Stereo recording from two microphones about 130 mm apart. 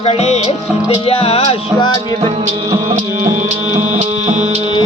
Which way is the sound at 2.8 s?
65° right (ahead or behind).